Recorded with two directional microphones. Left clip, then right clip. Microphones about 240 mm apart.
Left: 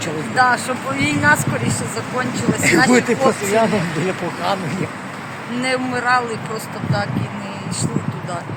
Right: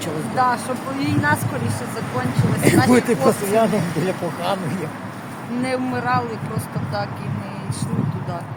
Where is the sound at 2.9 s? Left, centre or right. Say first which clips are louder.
Left 2 dB; right.